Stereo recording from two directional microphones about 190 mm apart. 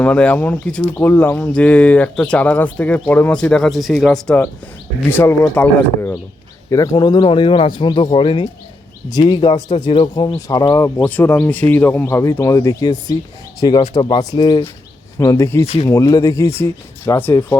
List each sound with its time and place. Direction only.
0.0 s a man's voice: 5° left (ahead or behind)
15.6 s speech: 30° left (ahead or behind)
15.9 s speech: 20° left (ahead or behind)